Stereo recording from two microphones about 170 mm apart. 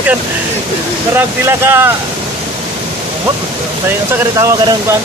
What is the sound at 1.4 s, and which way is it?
Speech, 15° right (ahead or behind).